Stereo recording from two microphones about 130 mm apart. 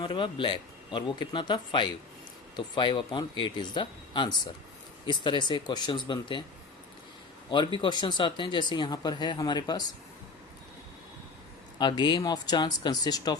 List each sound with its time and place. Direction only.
0.0 s speech: 40° left (ahead or behind)
7.5 s speech: 35° left (ahead or behind)
11.8 s speech: 35° left (ahead or behind)